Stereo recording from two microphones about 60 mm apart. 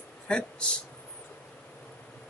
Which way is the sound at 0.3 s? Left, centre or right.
Centre.